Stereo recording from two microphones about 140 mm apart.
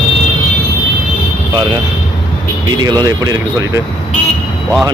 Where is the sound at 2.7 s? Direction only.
30° right (ahead or behind).